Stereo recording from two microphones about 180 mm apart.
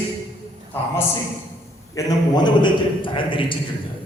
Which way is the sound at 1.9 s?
20° left (ahead or behind).